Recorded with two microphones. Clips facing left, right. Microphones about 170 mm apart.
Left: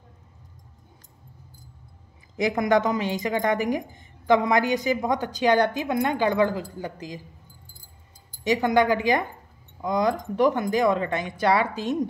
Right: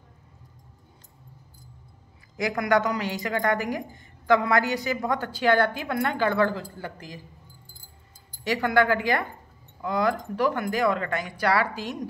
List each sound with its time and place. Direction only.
2.3 s a woman's voice: 20° left (ahead or behind)
8.5 s a woman's voice: 20° left (ahead or behind)